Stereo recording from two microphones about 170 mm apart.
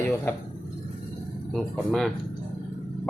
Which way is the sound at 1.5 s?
Centre (ahead or behind).